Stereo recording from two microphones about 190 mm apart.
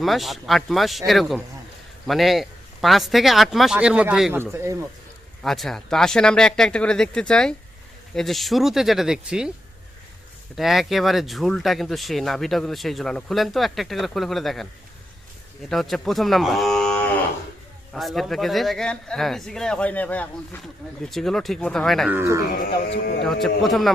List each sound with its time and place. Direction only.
0.0 s a man's voice: centre (ahead or behind)
5.4 s speech: centre (ahead or behind)
10.5 s speech: centre (ahead or behind)
15.7 s speech: centre (ahead or behind)
22.1 s a man's voice: 15° right (ahead or behind)
22.9 s speech: 60° left (ahead or behind)
23.2 s speech: centre (ahead or behind)